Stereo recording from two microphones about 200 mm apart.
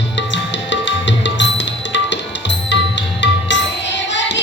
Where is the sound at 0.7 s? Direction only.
65° left (ahead or behind).